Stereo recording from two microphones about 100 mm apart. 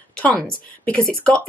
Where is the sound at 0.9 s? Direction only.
10° left (ahead or behind).